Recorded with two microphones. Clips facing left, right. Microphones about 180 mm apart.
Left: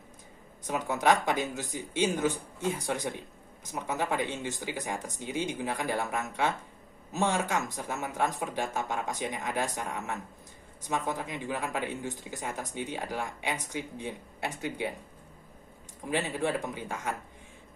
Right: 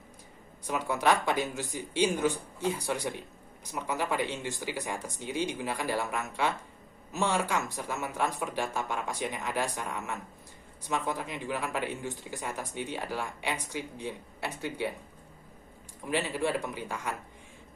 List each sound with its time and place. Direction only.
0.9 s speech: 20° left (ahead or behind)
16.0 s speech: 20° left (ahead or behind)